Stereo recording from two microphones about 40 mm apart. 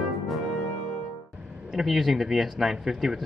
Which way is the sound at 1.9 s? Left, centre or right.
Centre.